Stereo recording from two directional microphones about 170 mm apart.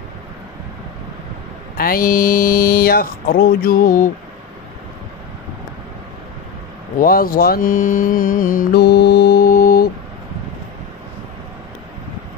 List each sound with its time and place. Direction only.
1.8 s speech: 60° left (ahead or behind)
7.0 s speech: 60° left (ahead or behind)